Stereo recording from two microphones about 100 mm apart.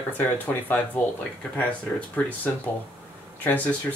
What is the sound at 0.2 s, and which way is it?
Speech, 15° left (ahead or behind).